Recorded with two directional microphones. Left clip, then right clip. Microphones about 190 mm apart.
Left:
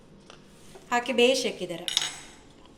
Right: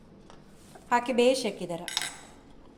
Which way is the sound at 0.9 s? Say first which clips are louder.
Left 1 dB; 60° right (ahead or behind).